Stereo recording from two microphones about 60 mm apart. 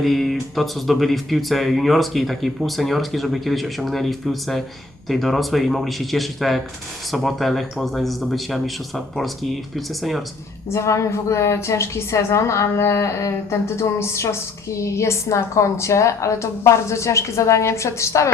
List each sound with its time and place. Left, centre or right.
0.0 s speech: centre
10.7 s a woman's voice: left